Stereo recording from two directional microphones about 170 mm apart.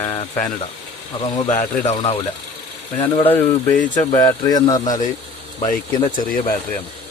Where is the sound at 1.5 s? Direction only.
45° left (ahead or behind).